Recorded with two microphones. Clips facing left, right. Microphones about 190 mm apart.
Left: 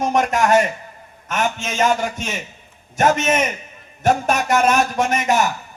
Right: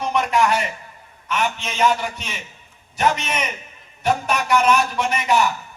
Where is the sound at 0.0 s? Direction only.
45° left (ahead or behind).